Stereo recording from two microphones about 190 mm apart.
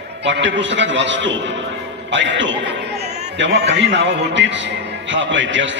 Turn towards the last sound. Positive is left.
turn(degrees=-75)  # may be behind; listen again after turning